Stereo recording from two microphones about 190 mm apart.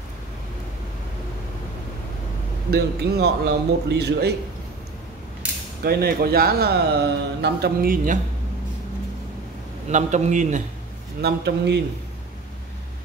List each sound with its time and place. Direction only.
2.7 s a man's voice: 55° right (ahead or behind)
5.4 s mechanisms: 5° right (ahead or behind)
5.9 s a man's voice: 55° right (ahead or behind)
9.8 s a man's voice: 40° right (ahead or behind)
11.1 s a man's voice: 60° right (ahead or behind)